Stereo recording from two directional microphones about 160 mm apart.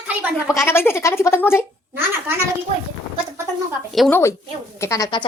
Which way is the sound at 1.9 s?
15° right (ahead or behind).